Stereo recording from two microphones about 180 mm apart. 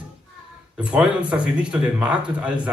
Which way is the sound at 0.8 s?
5° right (ahead or behind).